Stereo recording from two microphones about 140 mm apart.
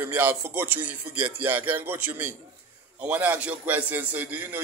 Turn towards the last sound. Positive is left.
turn(degrees=-10)  # may be behind; listen again after turning